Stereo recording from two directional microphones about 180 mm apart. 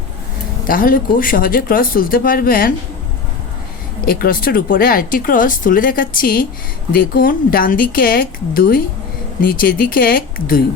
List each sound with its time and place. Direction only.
0.6 s speech: 50° left (ahead or behind)
4.0 s speech: 55° left (ahead or behind)